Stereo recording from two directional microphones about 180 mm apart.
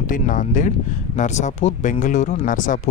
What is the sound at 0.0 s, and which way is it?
Speech, 45° left (ahead or behind).